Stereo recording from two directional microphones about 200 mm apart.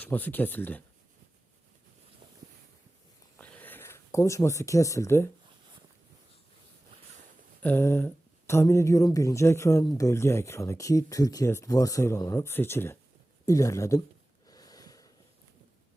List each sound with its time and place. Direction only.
0.0 s speech: 10° left (ahead or behind)
3.3 s a sound: 5° left (ahead or behind)
7.6 s speech: 10° left (ahead or behind)
14.4 s snort: 20° left (ahead or behind)